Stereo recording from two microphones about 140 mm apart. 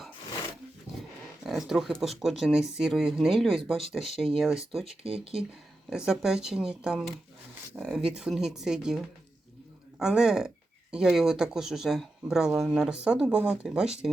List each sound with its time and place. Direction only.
1.5 s speech: 5° right (ahead or behind)
5.0 s speech: 45° right (ahead or behind)
5.9 s speech: 5° right (ahead or behind)